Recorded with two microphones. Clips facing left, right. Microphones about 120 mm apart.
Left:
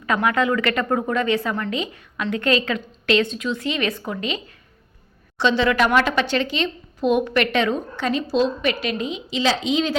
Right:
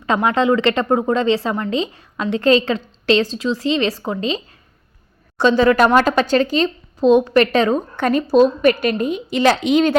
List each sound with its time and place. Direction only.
0.0 s a woman's voice: 30° right (ahead or behind)
5.4 s speech: 45° right (ahead or behind)
7.9 s a woman's voice: 55° right (ahead or behind)